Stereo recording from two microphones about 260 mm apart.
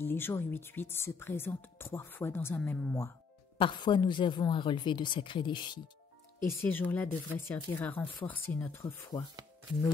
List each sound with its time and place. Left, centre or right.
0.0 s speech: centre
3.5 s speech: centre
6.4 s speech: centre